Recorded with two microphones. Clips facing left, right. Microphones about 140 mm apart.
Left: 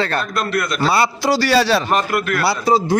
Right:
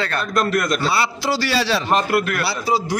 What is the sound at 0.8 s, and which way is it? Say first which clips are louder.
Speech: left 4 dB; 45° left (ahead or behind).